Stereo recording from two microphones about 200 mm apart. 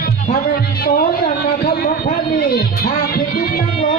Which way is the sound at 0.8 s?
45° left (ahead or behind).